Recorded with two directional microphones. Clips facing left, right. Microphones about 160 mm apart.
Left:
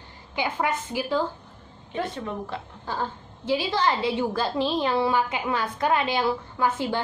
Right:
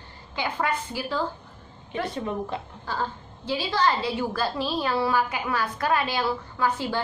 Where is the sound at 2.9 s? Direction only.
20° left (ahead or behind).